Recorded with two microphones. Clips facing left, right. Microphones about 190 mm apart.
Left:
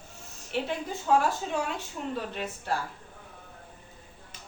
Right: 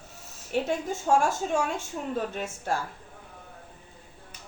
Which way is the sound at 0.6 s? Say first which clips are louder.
Right 3 dB; 45° right (ahead or behind).